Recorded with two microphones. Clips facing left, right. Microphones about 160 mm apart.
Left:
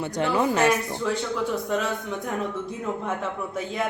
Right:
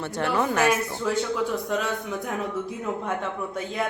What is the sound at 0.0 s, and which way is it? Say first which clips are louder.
Speech: left 1 dB; 15° left (ahead or behind).